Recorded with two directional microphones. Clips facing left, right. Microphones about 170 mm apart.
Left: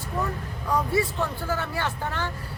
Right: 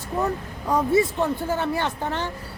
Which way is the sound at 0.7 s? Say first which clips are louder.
Right 5 dB; 20° right (ahead or behind).